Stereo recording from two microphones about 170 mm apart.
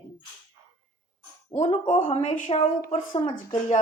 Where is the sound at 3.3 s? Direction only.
50° left (ahead or behind).